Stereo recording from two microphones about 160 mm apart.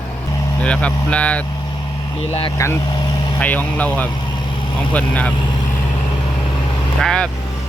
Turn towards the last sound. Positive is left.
turn(degrees=5)  # may be behind; listen again after turning